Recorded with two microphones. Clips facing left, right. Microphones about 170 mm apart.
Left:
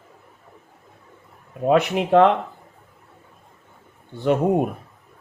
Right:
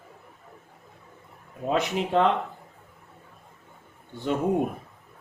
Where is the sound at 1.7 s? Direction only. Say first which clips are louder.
Left 8 dB; 65° left (ahead or behind).